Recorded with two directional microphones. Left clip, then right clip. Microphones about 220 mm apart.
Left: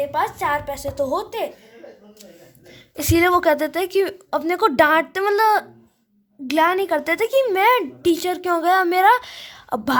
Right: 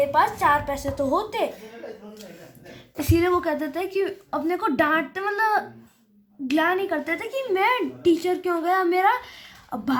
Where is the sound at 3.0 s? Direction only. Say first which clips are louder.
Left 6 dB; 50° left (ahead or behind).